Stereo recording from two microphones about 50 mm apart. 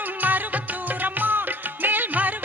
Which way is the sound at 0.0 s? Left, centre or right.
Right.